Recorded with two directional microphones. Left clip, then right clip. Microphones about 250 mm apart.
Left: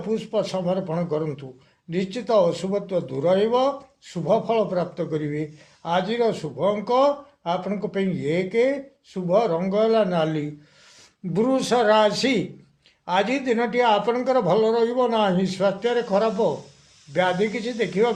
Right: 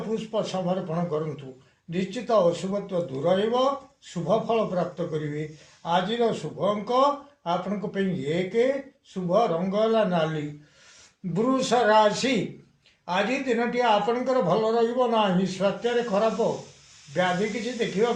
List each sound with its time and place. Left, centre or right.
0.1 s a man's voice: left
11.3 s a man's voice: left
17.7 s a man's voice: left